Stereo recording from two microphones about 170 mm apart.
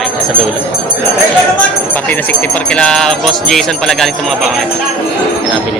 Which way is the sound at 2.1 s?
5° left (ahead or behind).